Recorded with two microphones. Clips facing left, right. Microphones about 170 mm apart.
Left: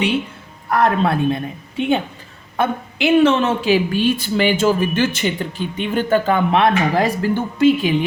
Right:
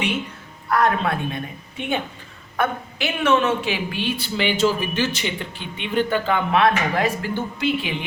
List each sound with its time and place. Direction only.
0.7 s speech: 30° left (ahead or behind)
2.6 s a woman's voice: 30° left (ahead or behind); by 6.4 s 45° left (ahead or behind)
6.5 s speech: 30° left (ahead or behind)